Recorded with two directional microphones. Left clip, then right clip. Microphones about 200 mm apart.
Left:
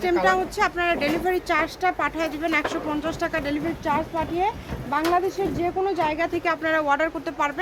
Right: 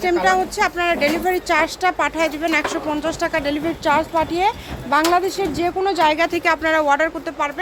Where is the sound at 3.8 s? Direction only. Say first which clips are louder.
Right 8 dB; 30° right (ahead or behind); by 7.1 s 15° right (ahead or behind).